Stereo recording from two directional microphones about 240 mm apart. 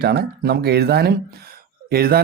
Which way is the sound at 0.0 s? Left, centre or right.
Right.